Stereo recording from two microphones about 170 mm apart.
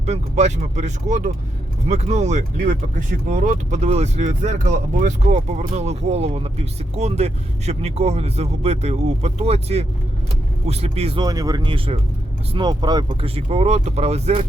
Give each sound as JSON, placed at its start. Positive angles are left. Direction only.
{"t": 0.0, "sound": "speech", "side_deg": -40}
{"t": 11.2, "sound": "speech", "side_deg": -20}